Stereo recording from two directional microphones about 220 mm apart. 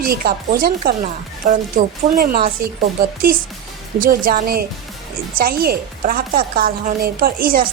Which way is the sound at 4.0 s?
40° right (ahead or behind).